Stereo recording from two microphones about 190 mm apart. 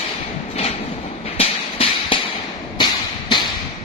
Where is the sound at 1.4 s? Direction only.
30° left (ahead or behind).